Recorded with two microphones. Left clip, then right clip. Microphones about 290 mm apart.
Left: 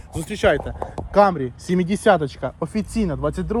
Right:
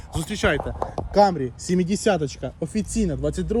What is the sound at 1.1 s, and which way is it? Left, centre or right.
Speech, left.